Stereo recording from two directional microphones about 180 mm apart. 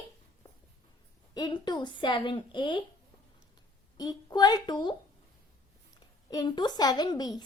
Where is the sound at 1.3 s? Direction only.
25° left (ahead or behind).